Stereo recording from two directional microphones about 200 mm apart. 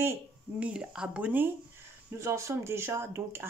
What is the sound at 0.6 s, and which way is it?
Speech, 5° right (ahead or behind).